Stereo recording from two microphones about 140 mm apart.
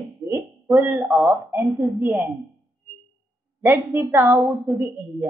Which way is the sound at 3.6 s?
15° right (ahead or behind).